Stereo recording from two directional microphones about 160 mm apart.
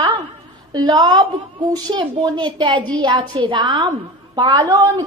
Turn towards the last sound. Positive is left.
turn(degrees=-25)  # may be behind; listen again after turning